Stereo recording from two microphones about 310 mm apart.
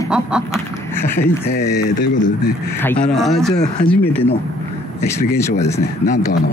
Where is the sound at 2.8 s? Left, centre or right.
Centre.